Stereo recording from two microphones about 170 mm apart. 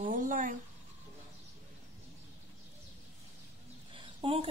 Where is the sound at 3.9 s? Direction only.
30° right (ahead or behind).